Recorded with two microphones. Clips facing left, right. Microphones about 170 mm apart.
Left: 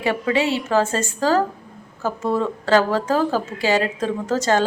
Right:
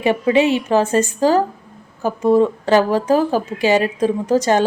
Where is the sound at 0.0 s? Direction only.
20° right (ahead or behind).